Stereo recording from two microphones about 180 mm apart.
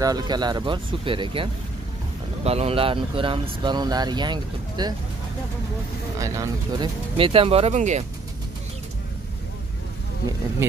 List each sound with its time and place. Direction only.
0.0 s speech: 20° right (ahead or behind)
6.1 s speech: 20° right (ahead or behind)
7.2 s speech: 30° right (ahead or behind)